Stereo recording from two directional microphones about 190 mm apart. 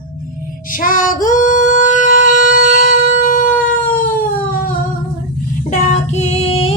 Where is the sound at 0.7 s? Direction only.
45° left (ahead or behind).